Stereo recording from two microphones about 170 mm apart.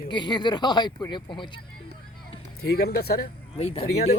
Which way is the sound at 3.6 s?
35° left (ahead or behind).